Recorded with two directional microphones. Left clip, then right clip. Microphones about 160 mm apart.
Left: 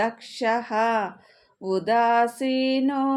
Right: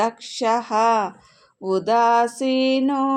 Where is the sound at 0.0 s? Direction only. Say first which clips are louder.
Right 3 dB; 35° right (ahead or behind).